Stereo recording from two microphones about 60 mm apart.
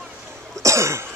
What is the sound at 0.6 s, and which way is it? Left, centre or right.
Cough, right.